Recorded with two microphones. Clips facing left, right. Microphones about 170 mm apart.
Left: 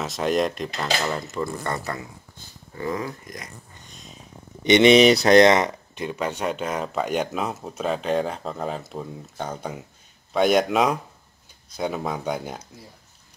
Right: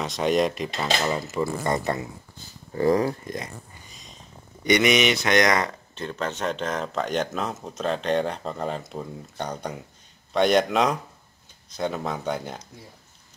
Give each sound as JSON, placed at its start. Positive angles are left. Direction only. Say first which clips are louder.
{"t": 0.0, "sound": "speech", "louder": "right 1 dB", "side_deg": 0}
{"t": 2.7, "sound": "speech", "louder": "right 8 dB", "side_deg": -35}
{"t": 3.9, "sound": "snort", "louder": "left 3 dB", "side_deg": 0}
{"t": 4.6, "sound": "speech", "louder": "left 6 dB", "side_deg": 25}